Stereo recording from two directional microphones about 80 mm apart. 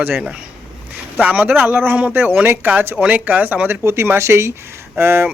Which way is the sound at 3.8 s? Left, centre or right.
Right.